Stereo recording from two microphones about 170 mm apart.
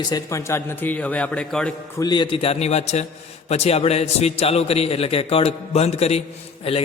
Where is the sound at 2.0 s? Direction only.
25° left (ahead or behind).